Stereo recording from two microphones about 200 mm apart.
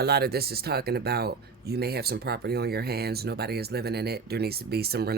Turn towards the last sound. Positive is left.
turn(degrees=-50)  # may be behind; listen again after turning